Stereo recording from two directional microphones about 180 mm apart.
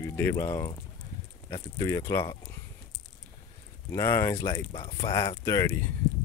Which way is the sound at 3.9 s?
15° left (ahead or behind).